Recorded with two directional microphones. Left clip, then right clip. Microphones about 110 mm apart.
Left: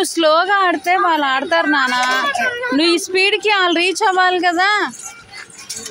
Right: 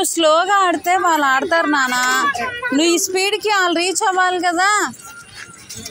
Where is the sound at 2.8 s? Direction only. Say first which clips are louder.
Left 2 dB; 20° left (ahead or behind).